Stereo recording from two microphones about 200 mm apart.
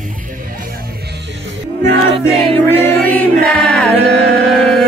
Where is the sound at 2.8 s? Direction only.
5° left (ahead or behind).